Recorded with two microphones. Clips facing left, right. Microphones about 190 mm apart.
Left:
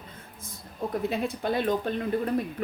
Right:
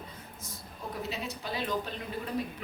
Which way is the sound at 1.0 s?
55° left (ahead or behind).